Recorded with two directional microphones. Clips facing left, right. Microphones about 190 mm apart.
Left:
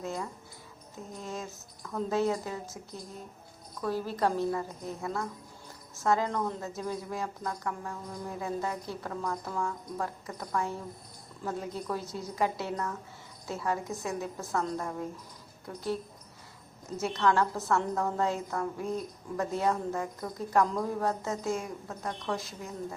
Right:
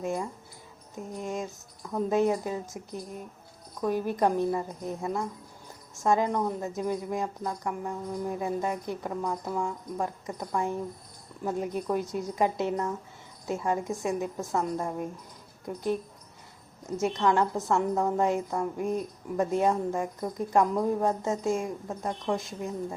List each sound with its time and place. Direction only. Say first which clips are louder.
0.0 s a woman's voice: right 5 dB; 15° right (ahead or behind)
17.0 s a woman's voice: right 2 dB; 20° right (ahead or behind)